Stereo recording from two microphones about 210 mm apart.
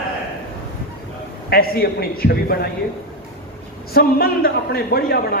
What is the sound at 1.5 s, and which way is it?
A man's voice, 45° left (ahead or behind).